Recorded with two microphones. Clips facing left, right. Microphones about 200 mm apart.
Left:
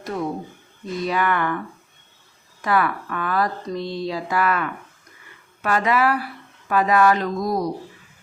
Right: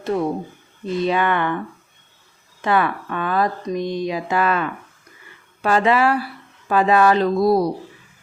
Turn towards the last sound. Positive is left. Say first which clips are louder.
# right 7 dB
turn(degrees=-30)  # may be behind; listen again after turning